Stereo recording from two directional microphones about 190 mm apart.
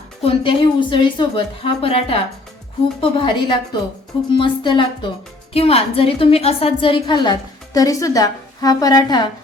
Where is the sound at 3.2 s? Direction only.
25° left (ahead or behind).